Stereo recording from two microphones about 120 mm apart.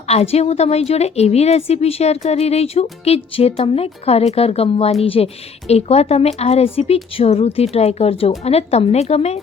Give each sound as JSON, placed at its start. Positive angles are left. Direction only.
{"t": 0.1, "sound": "a woman's voice", "side_deg": 60}